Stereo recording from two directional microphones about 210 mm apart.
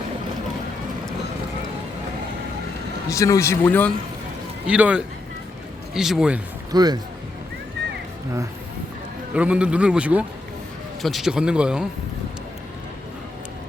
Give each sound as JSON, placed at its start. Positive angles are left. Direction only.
{"t": 3.1, "sound": "a man's voice", "side_deg": 15}
{"t": 4.6, "sound": "a man's voice", "side_deg": -5}
{"t": 6.7, "sound": "speech", "side_deg": -20}
{"t": 9.3, "sound": "a man's voice", "side_deg": -5}